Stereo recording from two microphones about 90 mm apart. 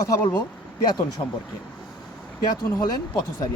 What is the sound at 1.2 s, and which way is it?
Speech, 65° left (ahead or behind).